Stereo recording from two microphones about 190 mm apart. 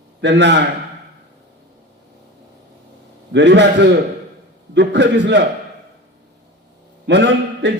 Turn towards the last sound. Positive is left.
turn(degrees=-65)  # may be behind; listen again after turning